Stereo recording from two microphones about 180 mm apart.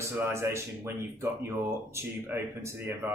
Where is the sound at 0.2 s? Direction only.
15° right (ahead or behind).